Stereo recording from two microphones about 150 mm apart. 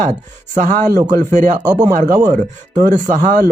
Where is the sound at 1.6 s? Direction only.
25° right (ahead or behind).